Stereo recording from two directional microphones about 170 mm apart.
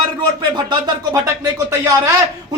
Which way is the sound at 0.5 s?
25° right (ahead or behind).